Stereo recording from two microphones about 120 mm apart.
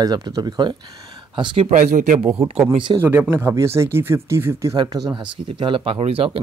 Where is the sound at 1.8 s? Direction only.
75° right (ahead or behind); by 2.6 s 55° right (ahead or behind).